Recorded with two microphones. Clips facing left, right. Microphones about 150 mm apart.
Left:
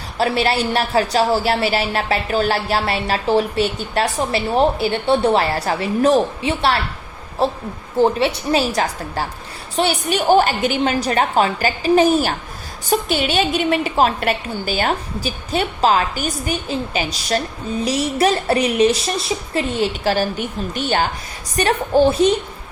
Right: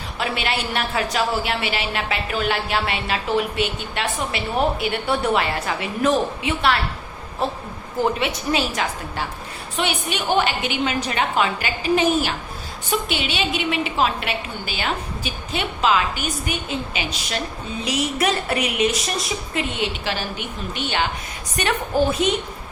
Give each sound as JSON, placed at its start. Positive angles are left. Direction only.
{"t": 0.2, "sound": "a woman's voice", "side_deg": 35}